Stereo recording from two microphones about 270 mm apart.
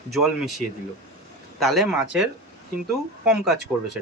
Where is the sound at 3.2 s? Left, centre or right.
Centre.